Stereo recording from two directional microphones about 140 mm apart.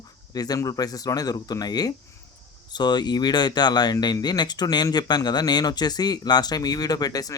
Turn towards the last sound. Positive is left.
turn(degrees=25)  # may be behind; listen again after turning